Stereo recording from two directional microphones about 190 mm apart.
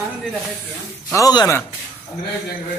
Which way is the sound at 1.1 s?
20° left (ahead or behind).